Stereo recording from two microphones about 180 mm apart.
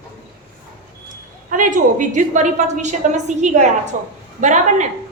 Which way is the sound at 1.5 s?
45° right (ahead or behind).